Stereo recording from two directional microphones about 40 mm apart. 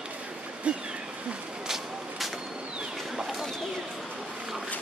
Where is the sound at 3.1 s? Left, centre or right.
Centre.